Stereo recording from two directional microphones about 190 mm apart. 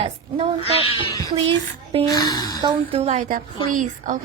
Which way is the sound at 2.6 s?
25° right (ahead or behind).